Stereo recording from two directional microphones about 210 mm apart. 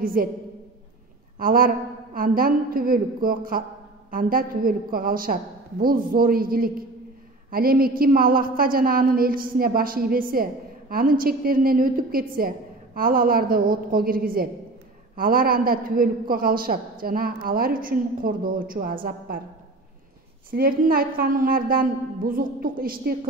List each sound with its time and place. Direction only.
0.0 s a woman's voice: 45° right (ahead or behind)
1.4 s a woman's voice: 45° right (ahead or behind)
20.5 s a woman's voice: 45° right (ahead or behind)